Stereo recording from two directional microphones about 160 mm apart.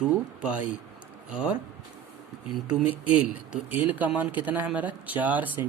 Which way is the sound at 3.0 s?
10° right (ahead or behind).